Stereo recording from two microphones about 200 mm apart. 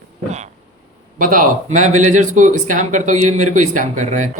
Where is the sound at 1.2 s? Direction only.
45° right (ahead or behind).